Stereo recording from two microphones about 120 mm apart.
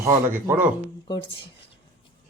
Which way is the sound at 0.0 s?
20° right (ahead or behind).